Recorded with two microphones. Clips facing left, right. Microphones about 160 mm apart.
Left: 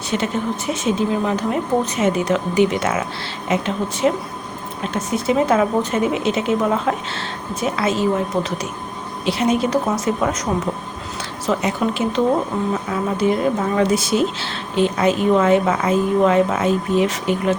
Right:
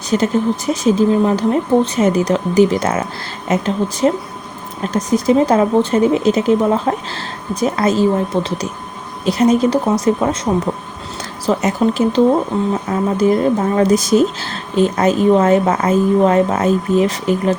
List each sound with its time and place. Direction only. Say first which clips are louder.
0.1 s speech: right 6 dB; 40° right (ahead or behind)
8.3 s a woman's voice: right 3 dB; 30° right (ahead or behind)
9.2 s speech: right 5 dB; 40° right (ahead or behind)